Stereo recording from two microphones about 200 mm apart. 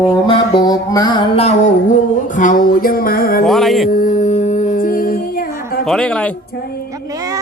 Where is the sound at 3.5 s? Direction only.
Centre (ahead or behind).